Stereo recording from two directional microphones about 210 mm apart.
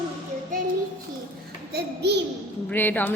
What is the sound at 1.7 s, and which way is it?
Speech, 50° right (ahead or behind).